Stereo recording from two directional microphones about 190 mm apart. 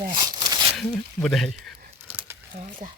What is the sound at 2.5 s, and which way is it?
Speech, 45° right (ahead or behind).